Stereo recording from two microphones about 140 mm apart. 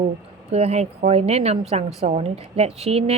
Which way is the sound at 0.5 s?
50° right (ahead or behind).